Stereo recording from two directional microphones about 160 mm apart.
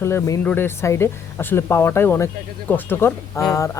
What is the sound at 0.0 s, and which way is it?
Speech, 15° left (ahead or behind).